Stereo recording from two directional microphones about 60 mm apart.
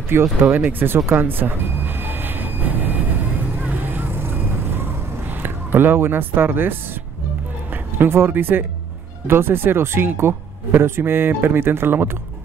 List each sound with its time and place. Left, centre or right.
0.1 s speech: right
0.6 s vehicle: right
5.4 s speech: right